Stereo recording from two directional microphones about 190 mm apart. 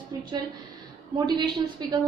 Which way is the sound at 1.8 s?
20° right (ahead or behind).